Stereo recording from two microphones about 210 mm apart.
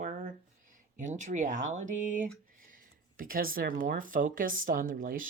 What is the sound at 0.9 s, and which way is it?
Speech, 35° right (ahead or behind).